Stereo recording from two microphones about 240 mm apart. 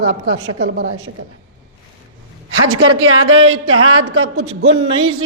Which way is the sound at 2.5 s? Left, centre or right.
Right.